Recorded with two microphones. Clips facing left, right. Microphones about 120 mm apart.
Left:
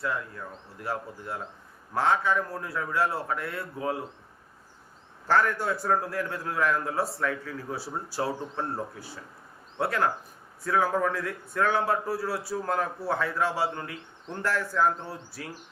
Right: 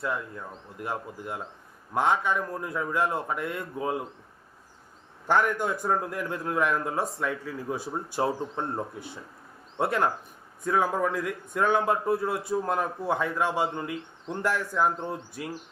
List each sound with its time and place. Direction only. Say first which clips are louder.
0.8 s a man's voice: even; 15° right (ahead or behind)
5.3 s a man's voice: even; 15° right (ahead or behind)